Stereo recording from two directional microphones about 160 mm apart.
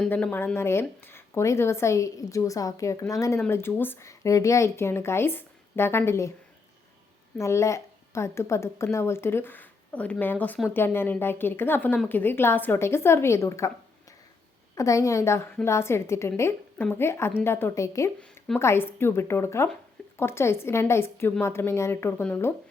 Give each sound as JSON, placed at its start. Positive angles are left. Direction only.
{"t": 0.0, "sound": "speech", "side_deg": 10}
{"t": 7.3, "sound": "speech", "side_deg": 15}
{"t": 14.8, "sound": "a woman's voice", "side_deg": 20}
{"t": 18.2, "sound": "a sound", "side_deg": 5}
{"t": 18.6, "sound": "speech", "side_deg": 15}